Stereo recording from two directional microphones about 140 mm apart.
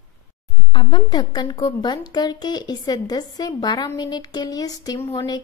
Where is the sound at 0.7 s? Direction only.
35° left (ahead or behind).